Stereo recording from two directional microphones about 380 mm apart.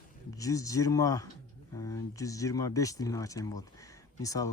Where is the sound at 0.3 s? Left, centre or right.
Centre.